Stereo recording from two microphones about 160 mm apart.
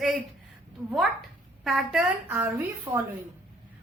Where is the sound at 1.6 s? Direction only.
5° right (ahead or behind).